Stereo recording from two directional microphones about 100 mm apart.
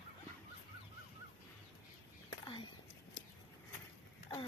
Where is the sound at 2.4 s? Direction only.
50° left (ahead or behind).